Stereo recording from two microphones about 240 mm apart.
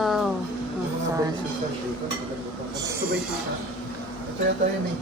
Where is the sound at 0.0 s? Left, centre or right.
Centre.